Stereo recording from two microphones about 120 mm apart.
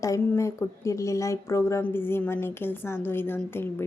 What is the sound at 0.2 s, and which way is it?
A woman's voice, 20° left (ahead or behind).